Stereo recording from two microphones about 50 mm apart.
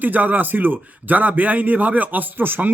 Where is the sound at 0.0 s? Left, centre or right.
Right.